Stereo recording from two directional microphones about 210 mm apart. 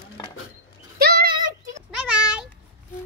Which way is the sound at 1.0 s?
45° right (ahead or behind).